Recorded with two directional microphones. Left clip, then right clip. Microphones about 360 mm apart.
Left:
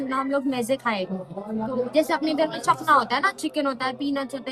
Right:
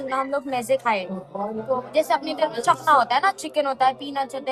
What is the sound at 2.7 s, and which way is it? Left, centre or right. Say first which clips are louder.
A woman's voice: right 2 dB; centre.